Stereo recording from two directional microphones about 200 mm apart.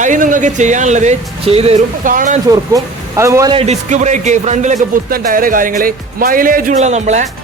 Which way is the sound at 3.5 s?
35° right (ahead or behind).